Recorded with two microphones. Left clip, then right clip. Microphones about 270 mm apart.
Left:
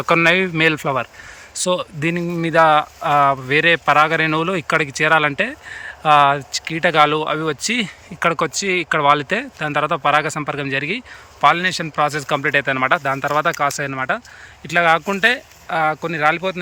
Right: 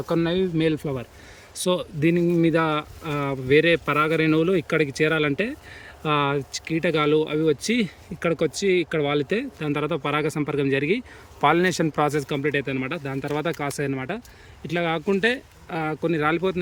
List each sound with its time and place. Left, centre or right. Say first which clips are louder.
0.3 s speech: left 9 dB; left
1.5 s speech: left 4 dB; centre